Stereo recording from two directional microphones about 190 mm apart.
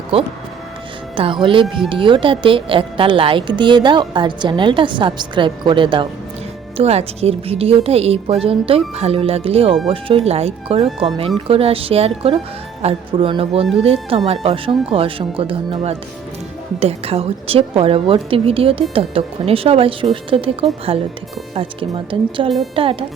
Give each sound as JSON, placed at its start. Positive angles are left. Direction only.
{"t": 0.1, "sound": "a woman's voice", "side_deg": -30}